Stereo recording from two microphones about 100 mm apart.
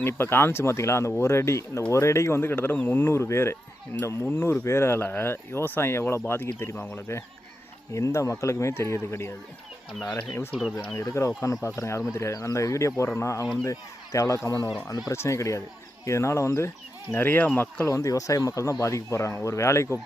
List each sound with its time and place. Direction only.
0.0 s speech: 25° left (ahead or behind)
10.5 s speech: 5° right (ahead or behind)
11.2 s speech: 30° left (ahead or behind)
17.8 s speech: 30° left (ahead or behind)